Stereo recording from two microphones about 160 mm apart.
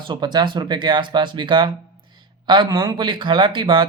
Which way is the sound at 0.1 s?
25° right (ahead or behind).